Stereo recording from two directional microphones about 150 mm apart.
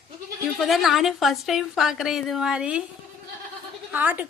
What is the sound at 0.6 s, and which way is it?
A woman's voice, centre (ahead or behind).